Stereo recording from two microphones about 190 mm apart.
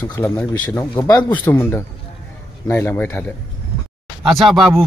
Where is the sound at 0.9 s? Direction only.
25° left (ahead or behind).